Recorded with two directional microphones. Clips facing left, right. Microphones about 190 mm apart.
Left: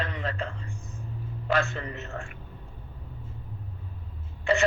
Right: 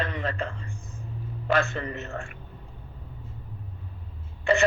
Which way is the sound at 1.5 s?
50° right (ahead or behind).